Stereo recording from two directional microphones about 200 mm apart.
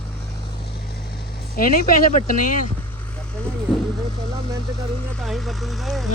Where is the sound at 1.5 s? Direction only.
45° left (ahead or behind).